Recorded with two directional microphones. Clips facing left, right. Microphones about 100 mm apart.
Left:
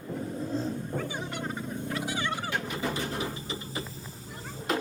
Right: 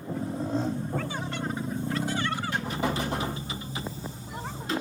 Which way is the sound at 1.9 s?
10° left (ahead or behind).